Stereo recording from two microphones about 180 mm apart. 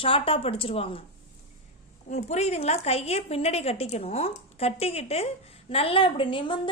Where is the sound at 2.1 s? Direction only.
40° left (ahead or behind).